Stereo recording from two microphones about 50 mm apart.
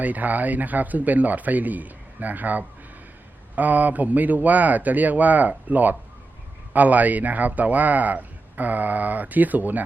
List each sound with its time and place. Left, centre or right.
0.0 s speech: right